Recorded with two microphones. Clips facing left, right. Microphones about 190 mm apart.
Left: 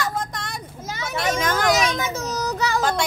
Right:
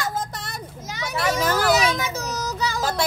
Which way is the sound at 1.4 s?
5° right (ahead or behind).